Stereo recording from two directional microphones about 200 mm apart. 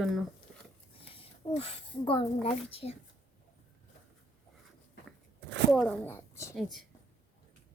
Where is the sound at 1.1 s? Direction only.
30° left (ahead or behind).